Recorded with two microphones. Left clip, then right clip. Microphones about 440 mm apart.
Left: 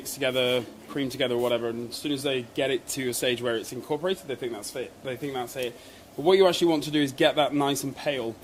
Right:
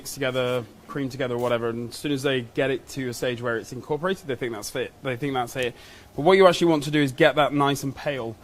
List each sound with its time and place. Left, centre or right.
0.2 s speech: right